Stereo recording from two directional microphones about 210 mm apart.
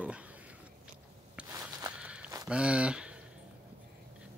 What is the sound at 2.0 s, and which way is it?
Walk, 5° right (ahead or behind).